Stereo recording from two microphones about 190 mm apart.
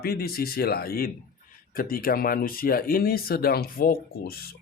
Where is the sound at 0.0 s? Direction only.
55° left (ahead or behind).